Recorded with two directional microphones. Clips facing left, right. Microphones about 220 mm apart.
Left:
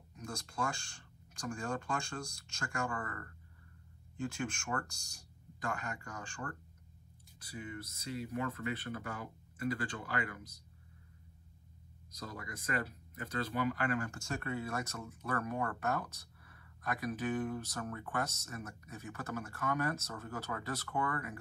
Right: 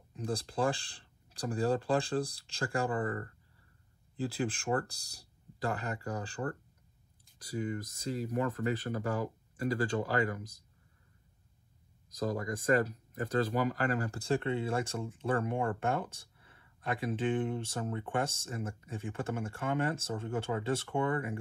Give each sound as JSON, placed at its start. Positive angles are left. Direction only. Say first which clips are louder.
{"t": 0.1, "sound": "speech", "louder": "right 9 dB", "side_deg": -30}
{"t": 12.2, "sound": "speech", "louder": "right 12 dB", "side_deg": -45}